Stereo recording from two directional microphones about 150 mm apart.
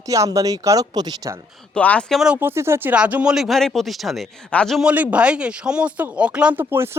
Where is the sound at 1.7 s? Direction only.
10° left (ahead or behind).